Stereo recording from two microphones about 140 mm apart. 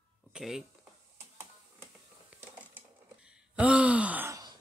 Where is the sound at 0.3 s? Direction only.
5° right (ahead or behind).